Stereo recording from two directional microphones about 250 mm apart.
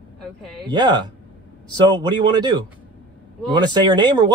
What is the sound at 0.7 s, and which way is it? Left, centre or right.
A man's voice, centre.